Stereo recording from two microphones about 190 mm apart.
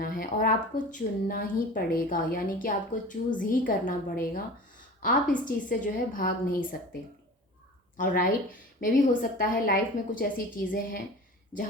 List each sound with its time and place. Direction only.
0.0 s a woman's voice: 45° left (ahead or behind)
5.5 s a woman's voice: 45° left (ahead or behind)
7.9 s a woman's voice: 45° left (ahead or behind)